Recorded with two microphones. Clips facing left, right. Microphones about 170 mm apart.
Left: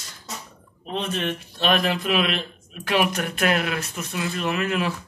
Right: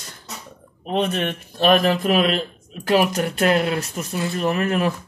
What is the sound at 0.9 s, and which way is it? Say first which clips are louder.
A man's voice: right 5 dB; 60° right (ahead or behind).